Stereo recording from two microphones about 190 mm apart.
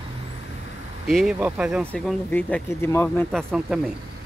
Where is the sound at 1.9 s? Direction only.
5° left (ahead or behind).